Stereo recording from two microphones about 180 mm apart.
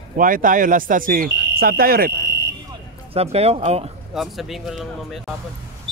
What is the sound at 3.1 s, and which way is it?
Speech, 35° right (ahead or behind).